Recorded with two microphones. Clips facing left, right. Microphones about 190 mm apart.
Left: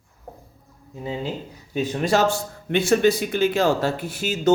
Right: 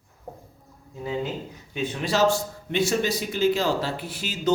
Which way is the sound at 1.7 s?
40° left (ahead or behind).